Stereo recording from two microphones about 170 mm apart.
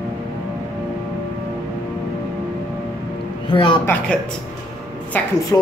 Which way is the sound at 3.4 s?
25° left (ahead or behind).